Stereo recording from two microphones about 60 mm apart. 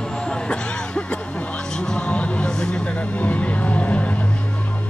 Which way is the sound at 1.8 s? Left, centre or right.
Centre.